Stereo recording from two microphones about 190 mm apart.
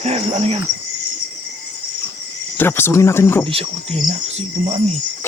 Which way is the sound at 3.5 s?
30° right (ahead or behind).